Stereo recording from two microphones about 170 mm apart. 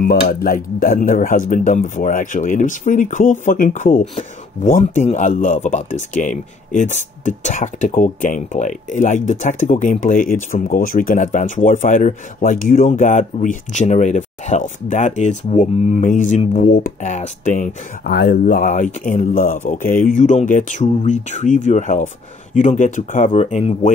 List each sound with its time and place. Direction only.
0.0 s speech: 60° left (ahead or behind)
16.6 s speech: 65° left (ahead or behind)
17.0 s speech: 45° left (ahead or behind)
18.1 s speech: 65° left (ahead or behind); by 23.3 s 50° left (ahead or behind)
23.3 s speech: 35° left (ahead or behind)